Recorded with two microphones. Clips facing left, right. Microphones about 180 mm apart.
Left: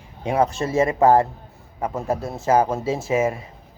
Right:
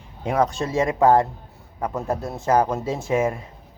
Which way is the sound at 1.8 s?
20° left (ahead or behind).